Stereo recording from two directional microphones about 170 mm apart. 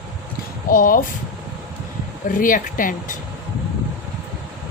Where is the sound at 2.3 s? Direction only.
55° left (ahead or behind).